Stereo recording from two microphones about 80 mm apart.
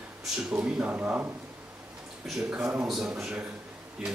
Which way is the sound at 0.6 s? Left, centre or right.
Centre.